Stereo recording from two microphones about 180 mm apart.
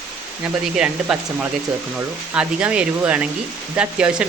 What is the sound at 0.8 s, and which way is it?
Speech, 5° right (ahead or behind).